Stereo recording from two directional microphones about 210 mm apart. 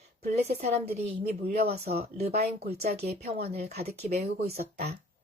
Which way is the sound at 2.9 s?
50° right (ahead or behind).